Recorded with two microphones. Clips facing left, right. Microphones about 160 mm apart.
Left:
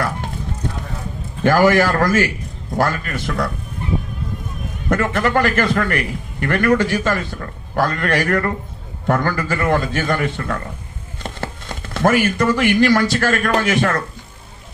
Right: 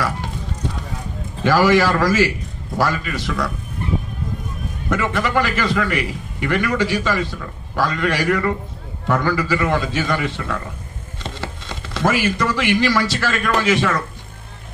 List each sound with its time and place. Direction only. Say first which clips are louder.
1.4 s a man's voice: left 1 dB; 50° left (ahead or behind)
4.8 s a man's voice: left 3 dB; 50° left (ahead or behind)